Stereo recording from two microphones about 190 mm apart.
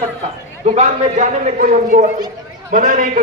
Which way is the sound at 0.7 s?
40° right (ahead or behind).